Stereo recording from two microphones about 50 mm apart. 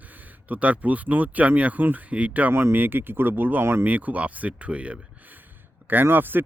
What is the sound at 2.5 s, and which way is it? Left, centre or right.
Speech, right.